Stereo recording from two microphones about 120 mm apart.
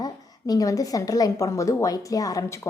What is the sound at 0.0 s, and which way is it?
A woman's voice, 30° left (ahead or behind).